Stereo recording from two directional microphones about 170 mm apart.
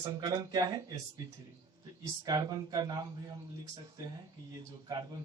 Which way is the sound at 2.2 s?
20° right (ahead or behind).